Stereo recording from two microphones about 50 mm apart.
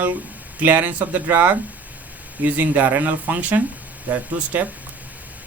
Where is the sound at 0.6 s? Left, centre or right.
Right.